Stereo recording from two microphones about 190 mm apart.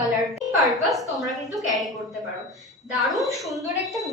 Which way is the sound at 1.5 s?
Centre (ahead or behind).